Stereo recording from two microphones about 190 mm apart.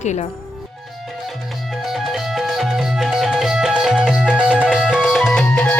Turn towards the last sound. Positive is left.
turn(degrees=5)  # may be behind; listen again after turning